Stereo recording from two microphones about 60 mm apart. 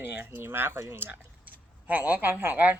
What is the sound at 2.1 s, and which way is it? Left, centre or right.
Speech, right.